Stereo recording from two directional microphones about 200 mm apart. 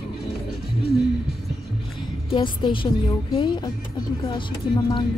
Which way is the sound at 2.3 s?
25° left (ahead or behind).